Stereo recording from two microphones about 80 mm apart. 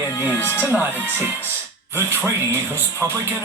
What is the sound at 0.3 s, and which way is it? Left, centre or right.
Speech, left.